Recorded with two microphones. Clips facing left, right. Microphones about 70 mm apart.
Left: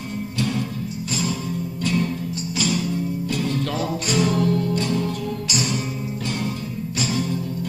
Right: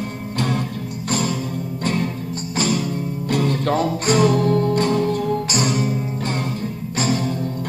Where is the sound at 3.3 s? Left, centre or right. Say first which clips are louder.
Right 9 dB; right.